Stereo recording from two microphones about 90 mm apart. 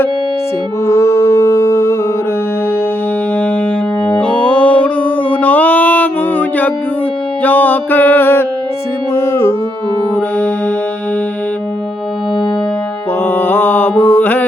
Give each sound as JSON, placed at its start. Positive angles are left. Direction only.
{"t": 0.9, "sound": "music", "side_deg": 30}
{"t": 4.0, "sound": "music", "side_deg": 15}
{"t": 10.2, "sound": "music", "side_deg": 20}
{"t": 13.2, "sound": "mantra", "side_deg": 20}